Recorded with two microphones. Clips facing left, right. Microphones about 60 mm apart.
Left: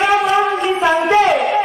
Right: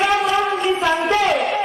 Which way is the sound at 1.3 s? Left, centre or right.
Centre.